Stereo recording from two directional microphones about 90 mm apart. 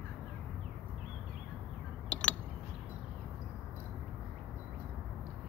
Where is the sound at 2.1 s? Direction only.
15° left (ahead or behind).